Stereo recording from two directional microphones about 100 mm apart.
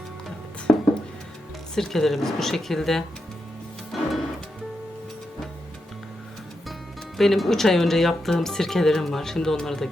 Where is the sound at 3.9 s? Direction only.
Centre (ahead or behind).